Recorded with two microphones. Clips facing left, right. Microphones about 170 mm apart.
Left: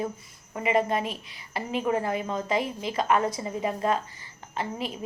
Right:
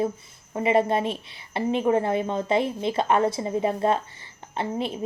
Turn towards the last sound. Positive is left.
turn(degrees=-30)  # may be behind; listen again after turning